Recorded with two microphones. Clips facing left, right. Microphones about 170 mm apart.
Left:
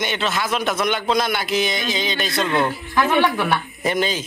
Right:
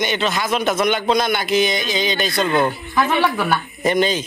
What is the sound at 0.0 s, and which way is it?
A man's voice, centre (ahead or behind).